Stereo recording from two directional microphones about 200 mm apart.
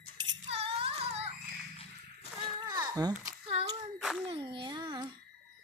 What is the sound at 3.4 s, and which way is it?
Child singing, 30° right (ahead or behind).